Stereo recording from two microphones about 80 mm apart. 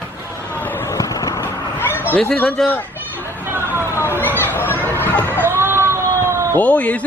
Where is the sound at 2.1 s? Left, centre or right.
Centre.